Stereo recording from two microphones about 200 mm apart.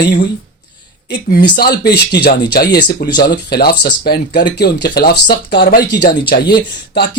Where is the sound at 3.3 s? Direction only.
55° left (ahead or behind).